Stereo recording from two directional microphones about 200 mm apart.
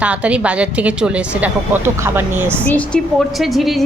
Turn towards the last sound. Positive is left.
turn(degrees=0)  # may be behind; listen again after turning